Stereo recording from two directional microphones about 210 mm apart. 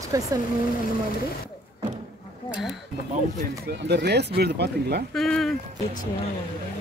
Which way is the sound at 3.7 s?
50° right (ahead or behind).